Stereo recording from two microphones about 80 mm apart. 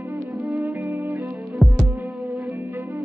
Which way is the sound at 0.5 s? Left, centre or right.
Right.